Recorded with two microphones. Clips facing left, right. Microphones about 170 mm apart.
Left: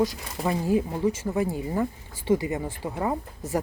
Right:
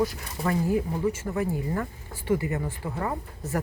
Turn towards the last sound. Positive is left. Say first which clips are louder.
# left 2 dB
turn(degrees=15)  # may be behind; listen again after turning